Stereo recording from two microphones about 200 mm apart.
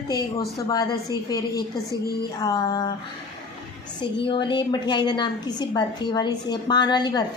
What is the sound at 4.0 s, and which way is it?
A woman's voice, 25° left (ahead or behind).